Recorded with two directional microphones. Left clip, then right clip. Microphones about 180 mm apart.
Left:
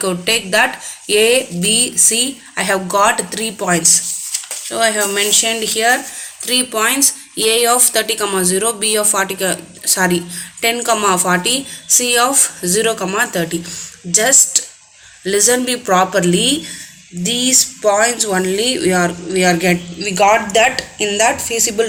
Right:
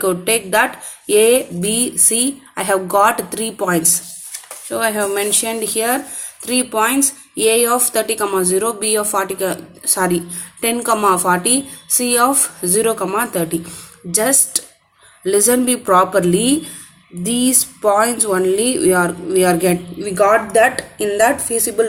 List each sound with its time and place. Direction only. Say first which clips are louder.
0.0 s a woman's voice: left 1 dB; 55° right (ahead or behind)